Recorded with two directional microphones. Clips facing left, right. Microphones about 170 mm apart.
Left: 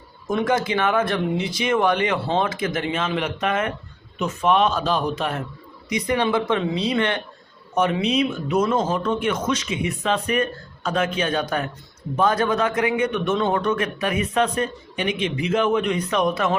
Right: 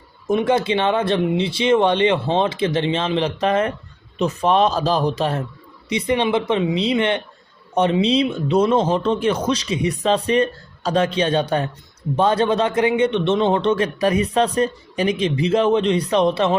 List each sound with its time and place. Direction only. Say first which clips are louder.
0.3 s a man's voice: right 4 dB; 25° right (ahead or behind)